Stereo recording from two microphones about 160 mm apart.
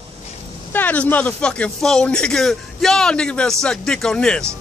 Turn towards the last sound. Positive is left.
turn(degrees=5)  # may be behind; listen again after turning